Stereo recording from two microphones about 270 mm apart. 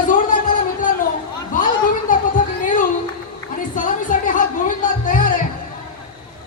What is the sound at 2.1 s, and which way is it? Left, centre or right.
Music, left.